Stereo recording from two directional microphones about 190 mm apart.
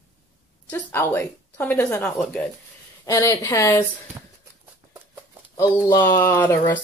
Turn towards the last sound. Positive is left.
turn(degrees=15)  # may be behind; listen again after turning